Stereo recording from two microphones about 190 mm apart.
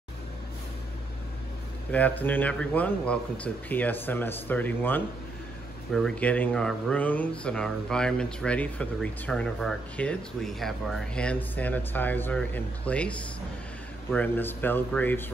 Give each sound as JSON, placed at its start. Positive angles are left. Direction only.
{"t": 1.9, "sound": "speech", "side_deg": 10}
{"t": 14.1, "sound": "speech", "side_deg": 10}